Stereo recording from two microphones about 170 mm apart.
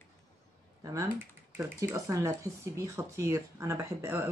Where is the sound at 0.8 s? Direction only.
20° right (ahead or behind).